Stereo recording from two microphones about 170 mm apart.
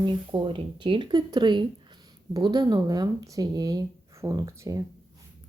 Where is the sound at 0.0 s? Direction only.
30° right (ahead or behind).